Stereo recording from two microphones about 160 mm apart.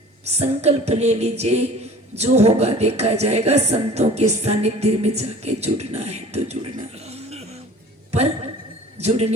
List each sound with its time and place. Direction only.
0.3 s a woman's voice: 40° right (ahead or behind)
9.0 s a woman's voice: 40° right (ahead or behind)